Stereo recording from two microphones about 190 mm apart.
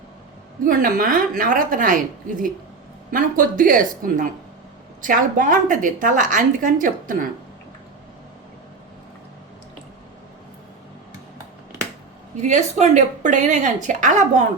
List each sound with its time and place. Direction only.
0.6 s a woman's voice: 45° right (ahead or behind)
12.4 s a woman's voice: 40° right (ahead or behind)